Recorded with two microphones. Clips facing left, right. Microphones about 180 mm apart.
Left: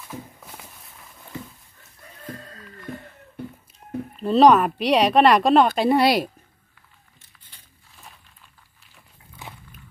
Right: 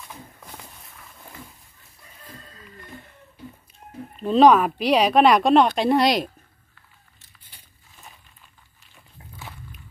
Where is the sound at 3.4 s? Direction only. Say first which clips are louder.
Left 6 dB; 60° left (ahead or behind).